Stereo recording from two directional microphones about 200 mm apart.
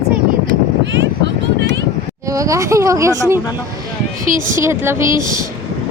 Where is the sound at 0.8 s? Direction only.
65° right (ahead or behind).